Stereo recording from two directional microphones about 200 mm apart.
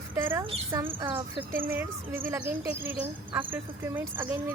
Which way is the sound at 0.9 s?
25° right (ahead or behind).